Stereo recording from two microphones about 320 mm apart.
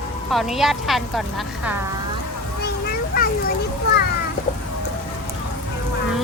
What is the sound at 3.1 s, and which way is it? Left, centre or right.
Children playing, left.